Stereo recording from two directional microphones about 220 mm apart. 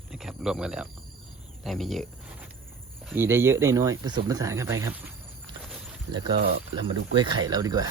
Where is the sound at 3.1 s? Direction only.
10° right (ahead or behind).